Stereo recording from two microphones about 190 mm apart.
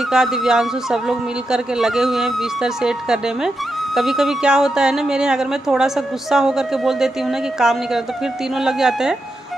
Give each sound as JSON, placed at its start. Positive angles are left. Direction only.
{"t": 0.1, "sound": "a man's voice", "side_deg": -5}